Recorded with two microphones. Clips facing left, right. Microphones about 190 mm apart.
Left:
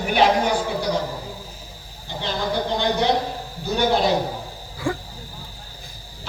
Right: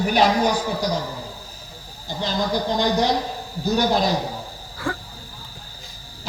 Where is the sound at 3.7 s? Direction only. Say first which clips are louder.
Even; 40° right (ahead or behind).